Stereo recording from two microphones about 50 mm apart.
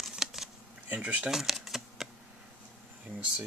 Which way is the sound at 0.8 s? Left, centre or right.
Right.